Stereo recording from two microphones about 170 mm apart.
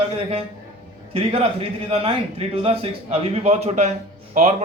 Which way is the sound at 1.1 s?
35° right (ahead or behind).